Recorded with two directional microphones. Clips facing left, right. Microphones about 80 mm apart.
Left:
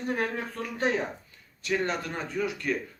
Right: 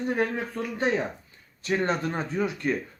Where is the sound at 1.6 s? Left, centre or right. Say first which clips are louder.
Right 3 dB; right.